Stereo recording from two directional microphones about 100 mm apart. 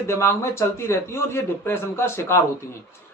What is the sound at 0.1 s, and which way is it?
Speech, 25° left (ahead or behind).